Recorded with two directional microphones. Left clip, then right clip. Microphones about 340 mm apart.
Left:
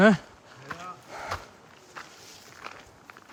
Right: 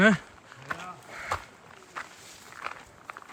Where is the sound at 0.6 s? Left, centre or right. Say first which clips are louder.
Right 3 dB; centre.